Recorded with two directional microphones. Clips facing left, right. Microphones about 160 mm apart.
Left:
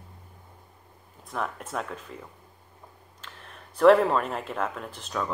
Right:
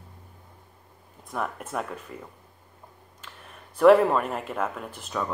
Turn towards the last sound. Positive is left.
turn(degrees=-5)  # may be behind; listen again after turning